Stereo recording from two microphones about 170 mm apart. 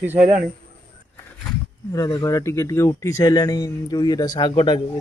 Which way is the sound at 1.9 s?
20° left (ahead or behind).